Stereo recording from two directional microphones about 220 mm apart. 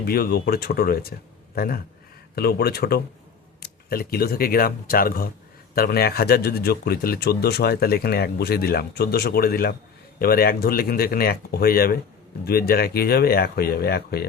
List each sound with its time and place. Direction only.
0.0 s a man's voice: 45° left (ahead or behind)